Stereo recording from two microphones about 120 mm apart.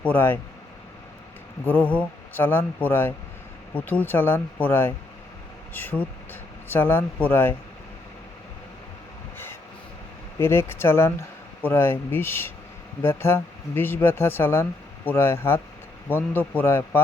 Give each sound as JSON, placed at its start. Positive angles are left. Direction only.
{"t": 0.0, "sound": "speech", "side_deg": 15}
{"t": 1.6, "sound": "speech", "side_deg": 10}
{"t": 10.3, "sound": "speech", "side_deg": 20}